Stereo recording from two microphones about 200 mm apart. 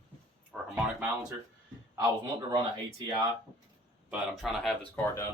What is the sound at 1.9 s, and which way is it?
Speech, 20° right (ahead or behind).